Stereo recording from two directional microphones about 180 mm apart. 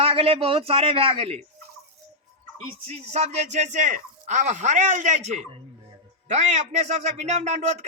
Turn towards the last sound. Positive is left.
turn(degrees=-40)  # may be behind; listen again after turning